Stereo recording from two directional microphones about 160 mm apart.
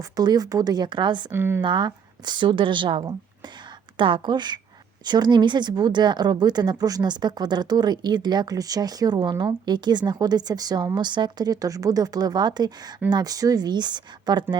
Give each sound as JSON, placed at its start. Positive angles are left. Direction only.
{"t": 0.0, "sound": "speech", "side_deg": -25}
{"t": 1.3, "sound": "speech", "side_deg": -15}
{"t": 1.6, "sound": "speech", "side_deg": -30}